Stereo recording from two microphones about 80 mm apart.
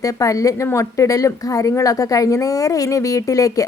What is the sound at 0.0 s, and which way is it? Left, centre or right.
A woman's voice, left.